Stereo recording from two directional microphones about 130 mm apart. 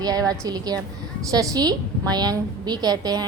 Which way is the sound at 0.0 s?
30° right (ahead or behind).